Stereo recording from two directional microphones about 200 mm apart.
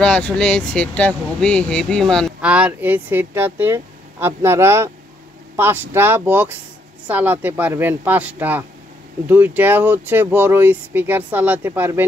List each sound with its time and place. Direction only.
0.0 s speech: 5° left (ahead or behind)